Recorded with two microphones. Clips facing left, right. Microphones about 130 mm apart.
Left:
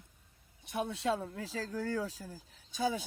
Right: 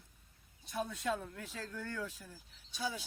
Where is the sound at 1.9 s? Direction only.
35° left (ahead or behind).